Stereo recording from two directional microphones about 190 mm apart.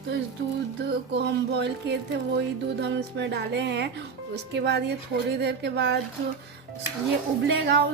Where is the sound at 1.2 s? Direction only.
60° right (ahead or behind).